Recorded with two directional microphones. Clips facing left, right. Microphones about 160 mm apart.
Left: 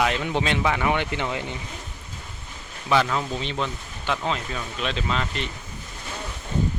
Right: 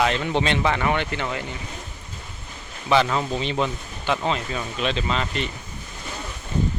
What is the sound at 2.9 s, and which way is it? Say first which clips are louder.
Speech: right 2 dB; centre (ahead or behind).